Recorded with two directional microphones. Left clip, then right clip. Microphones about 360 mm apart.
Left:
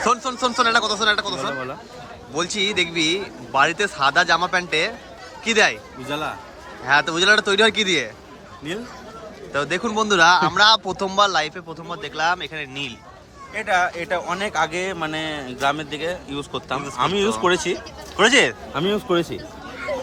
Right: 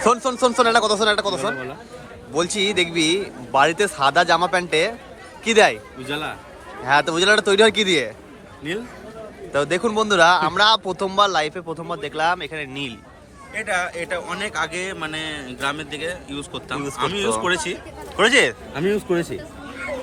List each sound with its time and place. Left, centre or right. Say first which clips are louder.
0.0 s a man's voice: right 3 dB; centre
9.5 s a man's voice: right 2 dB; centre; by 17.7 s left
18.2 s speech: even; centre